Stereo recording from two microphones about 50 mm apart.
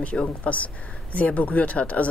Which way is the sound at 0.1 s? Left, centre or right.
Left.